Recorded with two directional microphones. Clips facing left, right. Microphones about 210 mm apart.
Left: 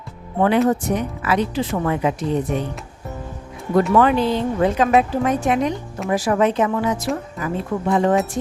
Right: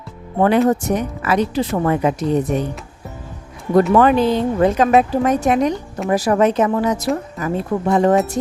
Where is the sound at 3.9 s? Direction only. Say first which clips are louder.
Right 1 dB; 45° right (ahead or behind).